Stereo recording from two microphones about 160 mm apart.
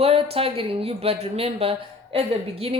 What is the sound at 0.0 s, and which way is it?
A woman's voice, 40° right (ahead or behind).